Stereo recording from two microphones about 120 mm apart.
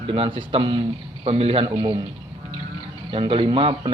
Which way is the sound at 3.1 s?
45° right (ahead or behind).